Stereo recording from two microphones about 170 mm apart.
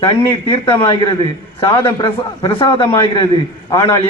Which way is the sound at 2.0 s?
30° left (ahead or behind).